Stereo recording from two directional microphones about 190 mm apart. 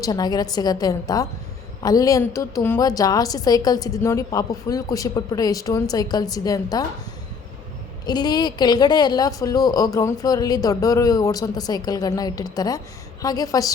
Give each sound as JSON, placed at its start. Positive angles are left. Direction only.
{"t": 0.0, "sound": "a woman's voice", "side_deg": 20}
{"t": 8.0, "sound": "a woman's voice", "side_deg": 20}